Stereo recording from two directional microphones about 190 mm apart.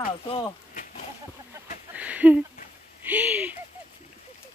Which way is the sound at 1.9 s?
10° right (ahead or behind).